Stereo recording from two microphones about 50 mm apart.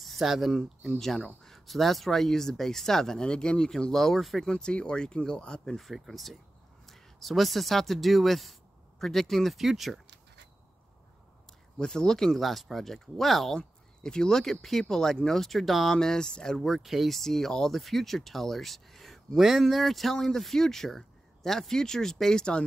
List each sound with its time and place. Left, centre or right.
0.0 s speech: centre
4.5 s speech: centre
5.8 s speech: centre
11.8 s speech: centre
13.6 s speech: centre